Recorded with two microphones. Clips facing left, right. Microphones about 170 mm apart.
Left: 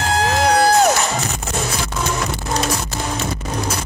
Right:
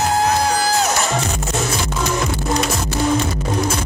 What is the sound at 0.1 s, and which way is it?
Music, 90° left.